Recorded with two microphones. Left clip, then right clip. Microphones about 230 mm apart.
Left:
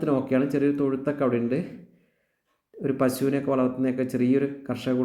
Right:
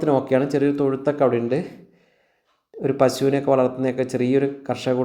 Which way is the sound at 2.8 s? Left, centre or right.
Centre.